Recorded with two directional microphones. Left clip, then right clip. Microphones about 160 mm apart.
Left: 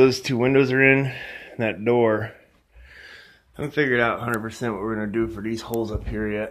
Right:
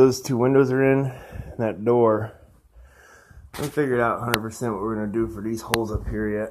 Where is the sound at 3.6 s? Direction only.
10° left (ahead or behind).